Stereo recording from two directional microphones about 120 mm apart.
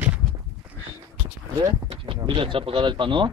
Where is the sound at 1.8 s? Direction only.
45° right (ahead or behind).